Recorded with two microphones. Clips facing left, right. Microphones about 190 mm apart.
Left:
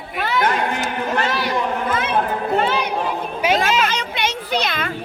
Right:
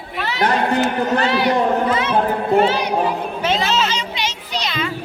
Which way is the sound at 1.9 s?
55° left (ahead or behind).